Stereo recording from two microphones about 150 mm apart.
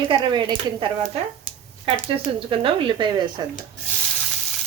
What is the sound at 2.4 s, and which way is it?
Speech, 35° right (ahead or behind).